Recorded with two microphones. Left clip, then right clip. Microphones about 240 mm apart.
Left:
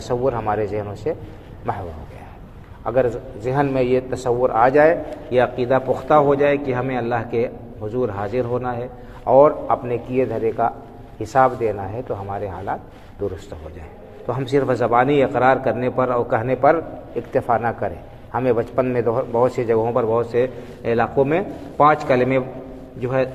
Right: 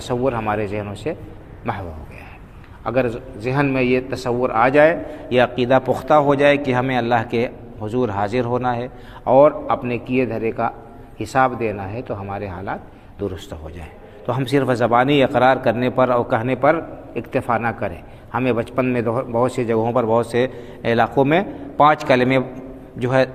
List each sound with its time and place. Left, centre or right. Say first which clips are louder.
0.1 s a man's voice: even; right
2.8 s a man's voice: left 1 dB; right